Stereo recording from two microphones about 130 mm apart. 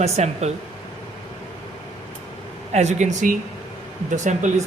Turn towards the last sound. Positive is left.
turn(degrees=-70)  # may be behind; listen again after turning